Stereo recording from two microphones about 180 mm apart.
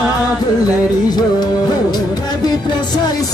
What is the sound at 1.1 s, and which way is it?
Music, 25° left (ahead or behind).